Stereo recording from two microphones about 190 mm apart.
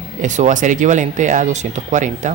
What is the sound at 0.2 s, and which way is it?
Speech, 40° right (ahead or behind).